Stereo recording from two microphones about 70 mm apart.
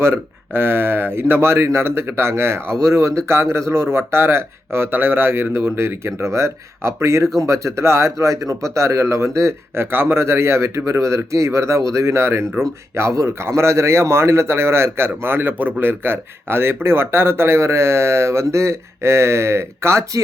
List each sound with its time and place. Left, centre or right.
0.0 s speech: right